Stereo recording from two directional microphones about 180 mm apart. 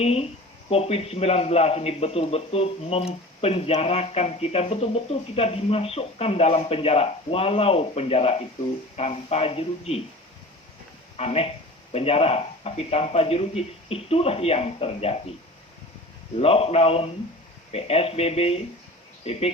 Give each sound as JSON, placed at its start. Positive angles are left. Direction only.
{"t": 0.0, "sound": "a man's voice", "side_deg": 35}
{"t": 11.2, "sound": "a man's voice", "side_deg": 35}
{"t": 16.4, "sound": "a man's voice", "side_deg": 35}